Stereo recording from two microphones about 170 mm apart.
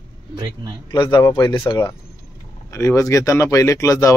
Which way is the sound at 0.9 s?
30° left (ahead or behind).